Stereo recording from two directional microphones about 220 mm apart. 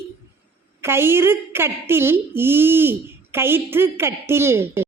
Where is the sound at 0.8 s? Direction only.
10° right (ahead or behind).